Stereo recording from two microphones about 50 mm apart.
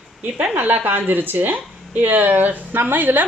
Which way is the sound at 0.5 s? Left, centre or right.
Right.